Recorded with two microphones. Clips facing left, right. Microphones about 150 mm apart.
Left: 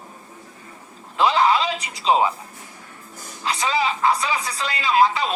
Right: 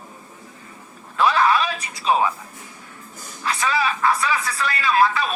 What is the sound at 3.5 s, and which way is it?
A man's voice, 20° left (ahead or behind).